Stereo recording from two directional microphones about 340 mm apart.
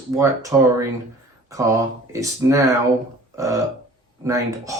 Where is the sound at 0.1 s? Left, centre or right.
Centre.